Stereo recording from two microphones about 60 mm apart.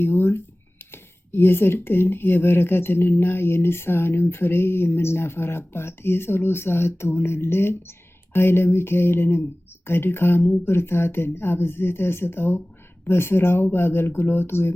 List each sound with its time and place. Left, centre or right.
0.0 s speech: left